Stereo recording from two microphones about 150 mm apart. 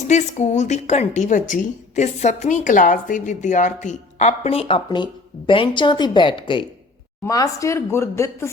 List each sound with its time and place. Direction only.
0.1 s a woman's voice: 50° left (ahead or behind); by 6.7 s 35° left (ahead or behind)
7.3 s speech: 20° left (ahead or behind)